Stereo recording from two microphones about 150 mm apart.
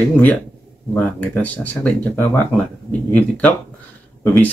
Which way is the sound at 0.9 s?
10° left (ahead or behind).